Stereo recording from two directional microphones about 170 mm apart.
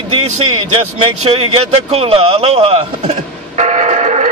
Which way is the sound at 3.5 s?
45° right (ahead or behind).